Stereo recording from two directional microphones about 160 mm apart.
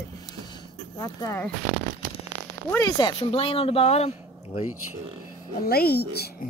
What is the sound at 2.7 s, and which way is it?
Speech, 25° left (ahead or behind).